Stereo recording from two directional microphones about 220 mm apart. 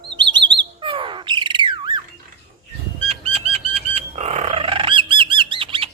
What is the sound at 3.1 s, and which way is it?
Bird flight, 25° right (ahead or behind).